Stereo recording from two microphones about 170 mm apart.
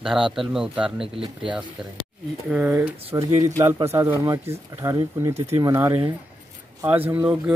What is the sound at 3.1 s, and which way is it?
Speech, 20° right (ahead or behind).